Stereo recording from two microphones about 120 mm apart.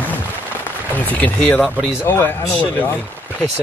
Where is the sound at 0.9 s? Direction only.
15° left (ahead or behind).